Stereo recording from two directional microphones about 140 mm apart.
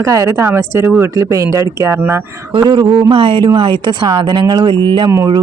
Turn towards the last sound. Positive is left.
turn(degrees=-25)  # may be behind; listen again after turning